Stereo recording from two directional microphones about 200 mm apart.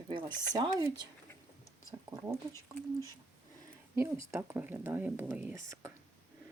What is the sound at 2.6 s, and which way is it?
Speech, 15° left (ahead or behind).